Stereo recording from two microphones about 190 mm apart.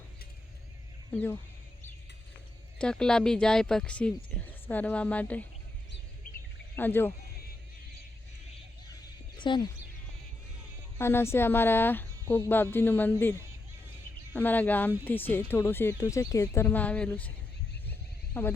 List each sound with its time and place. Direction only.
1.1 s speech: 10° left (ahead or behind)
2.7 s speech: 5° left (ahead or behind)
6.7 s speech: 10° left (ahead or behind)
9.4 s speech: 25° left (ahead or behind)
10.9 s speech: 15° left (ahead or behind)
14.3 s speech: 10° left (ahead or behind)
18.3 s speech: 10° left (ahead or behind)